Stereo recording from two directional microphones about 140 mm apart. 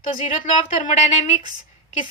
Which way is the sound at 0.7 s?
60° left (ahead or behind).